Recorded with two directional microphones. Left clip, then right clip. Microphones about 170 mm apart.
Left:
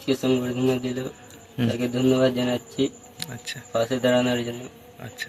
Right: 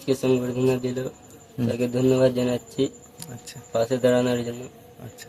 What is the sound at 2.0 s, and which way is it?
Speech, 35° right (ahead or behind).